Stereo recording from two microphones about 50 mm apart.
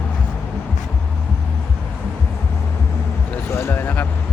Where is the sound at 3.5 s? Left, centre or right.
Left.